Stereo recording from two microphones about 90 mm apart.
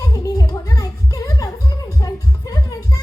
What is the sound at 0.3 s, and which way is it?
Music, 45° left (ahead or behind).